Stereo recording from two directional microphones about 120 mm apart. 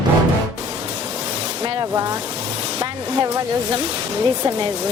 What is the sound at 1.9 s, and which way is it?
Vehicle, 30° right (ahead or behind).